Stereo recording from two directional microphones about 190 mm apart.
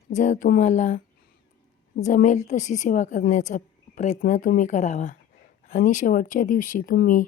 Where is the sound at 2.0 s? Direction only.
40° left (ahead or behind).